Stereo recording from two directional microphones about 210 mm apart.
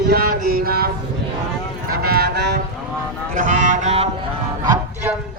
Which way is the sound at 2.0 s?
45° right (ahead or behind).